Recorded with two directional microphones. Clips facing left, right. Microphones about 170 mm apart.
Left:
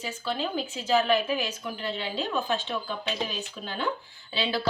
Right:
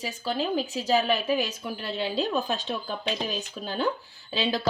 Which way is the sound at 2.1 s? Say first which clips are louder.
Right 1 dB; 40° right (ahead or behind).